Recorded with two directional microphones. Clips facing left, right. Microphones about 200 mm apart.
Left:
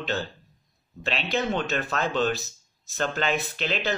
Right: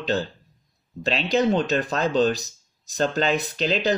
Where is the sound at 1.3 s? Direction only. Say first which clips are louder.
Right 6 dB; 40° right (ahead or behind).